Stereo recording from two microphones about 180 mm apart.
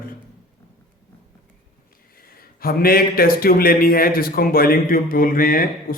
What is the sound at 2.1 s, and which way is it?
Speech, 55° left (ahead or behind).